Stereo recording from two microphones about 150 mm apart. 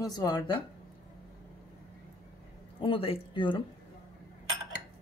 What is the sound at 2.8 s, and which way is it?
Speech, 40° left (ahead or behind).